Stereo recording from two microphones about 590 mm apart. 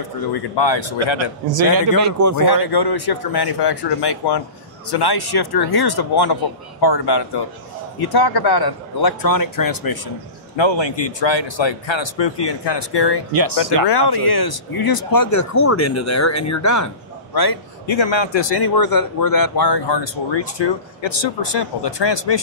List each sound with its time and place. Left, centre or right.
0.3 s speech: left
1.1 s a man's voice: right
2.3 s speech: left
10.5 s speech: left